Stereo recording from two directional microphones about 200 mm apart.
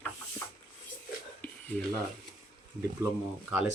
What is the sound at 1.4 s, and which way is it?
Music, 10° left (ahead or behind).